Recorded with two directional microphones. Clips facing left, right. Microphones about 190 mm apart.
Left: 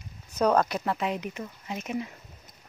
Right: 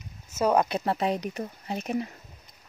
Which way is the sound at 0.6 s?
25° right (ahead or behind).